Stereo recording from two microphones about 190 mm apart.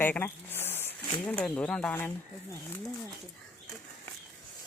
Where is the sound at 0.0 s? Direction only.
10° left (ahead or behind).